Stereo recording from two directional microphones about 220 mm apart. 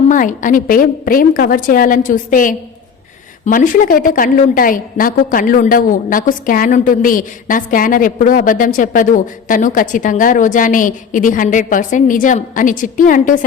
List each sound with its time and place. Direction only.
0.1 s a woman's voice: 35° left (ahead or behind)